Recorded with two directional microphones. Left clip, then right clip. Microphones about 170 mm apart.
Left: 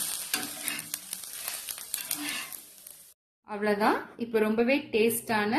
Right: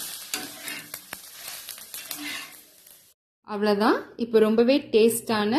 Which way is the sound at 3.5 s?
30° right (ahead or behind).